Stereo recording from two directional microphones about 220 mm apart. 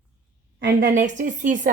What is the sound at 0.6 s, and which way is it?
Speech, 45° right (ahead or behind).